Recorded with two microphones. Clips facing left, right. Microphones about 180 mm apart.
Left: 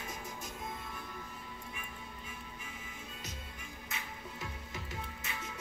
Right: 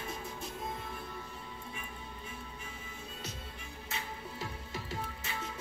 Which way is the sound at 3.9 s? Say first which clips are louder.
Right 4 dB; 30° right (ahead or behind).